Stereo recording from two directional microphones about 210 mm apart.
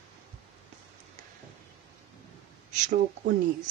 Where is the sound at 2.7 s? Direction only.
35° right (ahead or behind).